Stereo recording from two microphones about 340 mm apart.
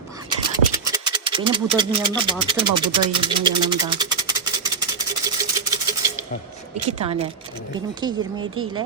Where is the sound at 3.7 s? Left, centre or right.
Centre.